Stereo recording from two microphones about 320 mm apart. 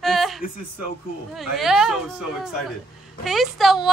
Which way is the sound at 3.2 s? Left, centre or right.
Centre.